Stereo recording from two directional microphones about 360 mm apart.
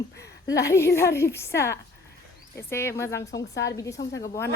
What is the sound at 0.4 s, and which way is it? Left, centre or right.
Speech, centre.